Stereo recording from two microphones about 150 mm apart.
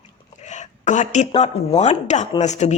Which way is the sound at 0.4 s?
50° left (ahead or behind).